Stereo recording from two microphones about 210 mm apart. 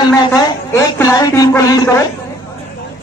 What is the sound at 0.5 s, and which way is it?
Speech, 15° left (ahead or behind).